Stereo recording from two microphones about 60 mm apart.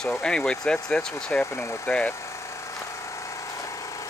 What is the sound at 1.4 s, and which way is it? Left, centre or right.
Speech, left.